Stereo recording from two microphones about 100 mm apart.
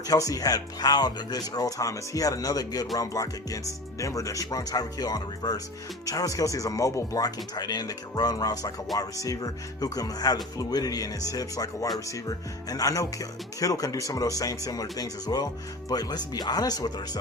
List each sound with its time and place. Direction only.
0.1 s speech: 35° left (ahead or behind)